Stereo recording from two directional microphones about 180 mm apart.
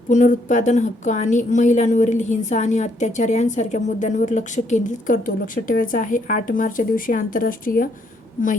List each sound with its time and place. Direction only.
0.1 s speech: 45° left (ahead or behind)